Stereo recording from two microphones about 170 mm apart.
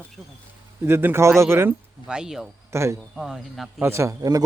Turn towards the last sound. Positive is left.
turn(degrees=-20)  # may be behind; listen again after turning